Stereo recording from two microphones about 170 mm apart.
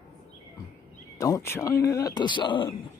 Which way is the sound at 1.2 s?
15° left (ahead or behind).